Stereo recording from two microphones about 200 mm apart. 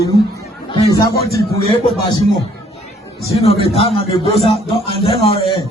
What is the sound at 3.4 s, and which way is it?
Speech, 30° left (ahead or behind).